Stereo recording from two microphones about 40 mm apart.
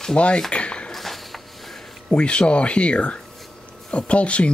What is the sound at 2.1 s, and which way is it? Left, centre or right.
Speech, left.